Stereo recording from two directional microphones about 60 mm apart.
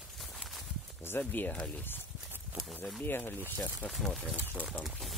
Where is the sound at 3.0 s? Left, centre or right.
Left.